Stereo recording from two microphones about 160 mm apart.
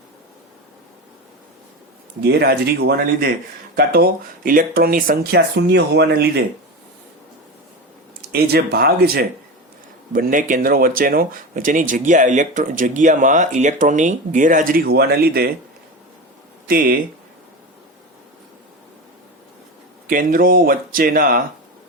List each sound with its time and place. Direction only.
2.2 s speech: 85° right
8.3 s speech: 75° right (ahead or behind)
10.1 s speech: 60° right (ahead or behind)
16.6 s speech: 65° right (ahead or behind)
20.1 s speech: 60° right (ahead or behind)